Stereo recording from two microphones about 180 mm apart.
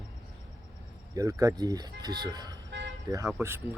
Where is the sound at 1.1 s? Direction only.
20° right (ahead or behind).